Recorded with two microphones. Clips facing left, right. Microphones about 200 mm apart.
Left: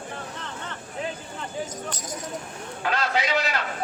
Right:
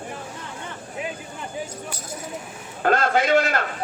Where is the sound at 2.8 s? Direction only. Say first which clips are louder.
Right 6 dB; 50° right (ahead or behind).